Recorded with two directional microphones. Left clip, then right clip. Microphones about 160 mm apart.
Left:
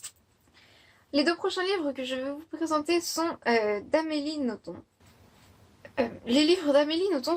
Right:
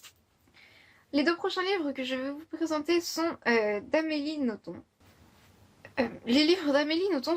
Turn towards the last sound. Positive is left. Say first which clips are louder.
# left 1 dB
turn(degrees=-35)  # may be behind; listen again after turning